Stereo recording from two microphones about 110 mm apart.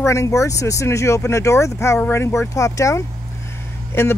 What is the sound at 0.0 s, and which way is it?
Speech, 25° left (ahead or behind).